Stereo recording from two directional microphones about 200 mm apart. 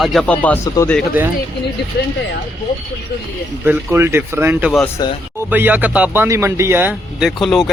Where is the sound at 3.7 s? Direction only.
10° right (ahead or behind).